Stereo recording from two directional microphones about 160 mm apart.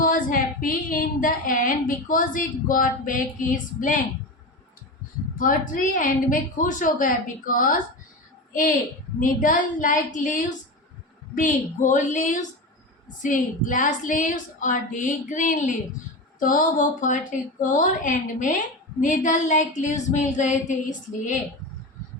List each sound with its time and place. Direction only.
0.0 s a woman's voice: 60° left (ahead or behind)
5.4 s a woman's voice: 55° left (ahead or behind)
9.2 s a woman's voice: 55° left (ahead or behind)